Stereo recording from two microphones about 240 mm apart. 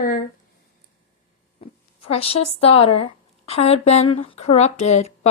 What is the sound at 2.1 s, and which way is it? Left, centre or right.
Speech, left.